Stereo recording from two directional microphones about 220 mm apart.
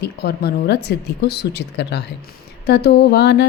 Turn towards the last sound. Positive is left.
turn(degrees=50)  # may be behind; listen again after turning